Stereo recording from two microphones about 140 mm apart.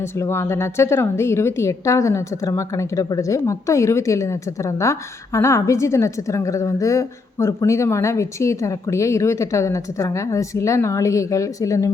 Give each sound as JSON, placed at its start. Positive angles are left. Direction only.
{"t": 0.0, "sound": "a woman's voice", "side_deg": 20}